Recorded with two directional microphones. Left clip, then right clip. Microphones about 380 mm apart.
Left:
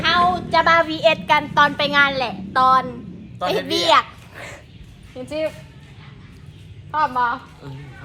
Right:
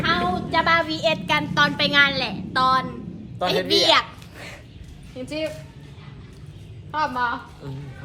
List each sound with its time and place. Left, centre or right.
0.0 s a child's voice: centre
3.7 s a sound: centre
5.2 s a woman's voice: centre
6.9 s a woman's voice: centre